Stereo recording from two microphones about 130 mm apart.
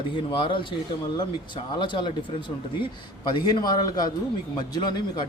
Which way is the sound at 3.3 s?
30° left (ahead or behind).